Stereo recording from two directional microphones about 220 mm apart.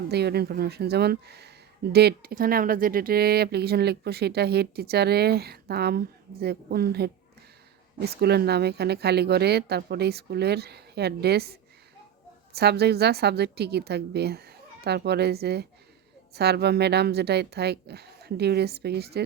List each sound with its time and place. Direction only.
0.1 s speech: 50° right (ahead or behind)
12.5 s speech: 45° right (ahead or behind)